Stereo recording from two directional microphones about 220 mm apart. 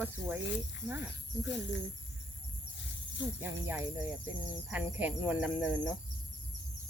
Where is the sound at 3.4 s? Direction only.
10° right (ahead or behind).